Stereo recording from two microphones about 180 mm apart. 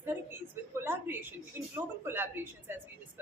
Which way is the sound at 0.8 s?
15° right (ahead or behind).